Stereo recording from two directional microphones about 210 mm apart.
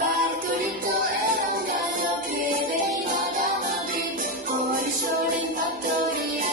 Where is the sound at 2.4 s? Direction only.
40° right (ahead or behind).